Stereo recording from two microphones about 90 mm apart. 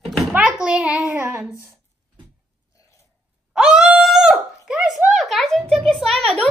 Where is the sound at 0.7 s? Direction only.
10° right (ahead or behind).